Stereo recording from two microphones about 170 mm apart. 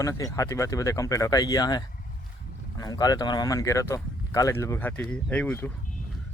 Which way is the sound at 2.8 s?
20° left (ahead or behind).